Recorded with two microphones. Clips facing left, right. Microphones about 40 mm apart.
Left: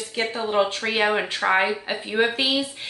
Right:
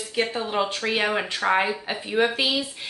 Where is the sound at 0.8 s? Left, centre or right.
Centre.